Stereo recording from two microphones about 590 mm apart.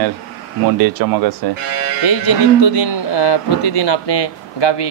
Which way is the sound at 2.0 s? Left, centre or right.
Left.